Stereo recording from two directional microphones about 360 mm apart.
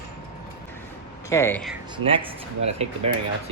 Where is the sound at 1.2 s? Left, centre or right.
Centre.